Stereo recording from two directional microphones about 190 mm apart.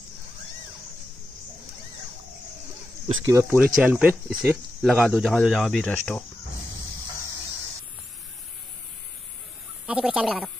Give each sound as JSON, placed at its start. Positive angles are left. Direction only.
{"t": 3.3, "sound": "speech", "side_deg": -10}
{"t": 9.8, "sound": "speech", "side_deg": -5}